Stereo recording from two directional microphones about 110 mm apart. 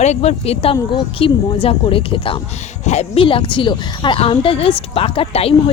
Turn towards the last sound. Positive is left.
turn(degrees=60)  # may be behind; listen again after turning